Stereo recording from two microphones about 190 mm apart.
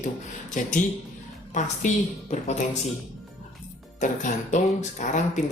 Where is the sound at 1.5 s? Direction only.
40° left (ahead or behind).